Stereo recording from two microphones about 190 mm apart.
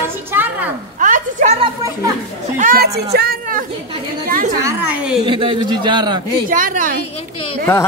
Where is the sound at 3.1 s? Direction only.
50° right (ahead or behind).